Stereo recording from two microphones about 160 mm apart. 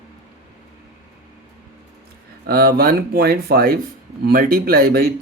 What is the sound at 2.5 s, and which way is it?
Speech, 70° right (ahead or behind).